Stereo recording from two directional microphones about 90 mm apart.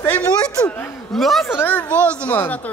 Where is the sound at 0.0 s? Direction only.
20° left (ahead or behind).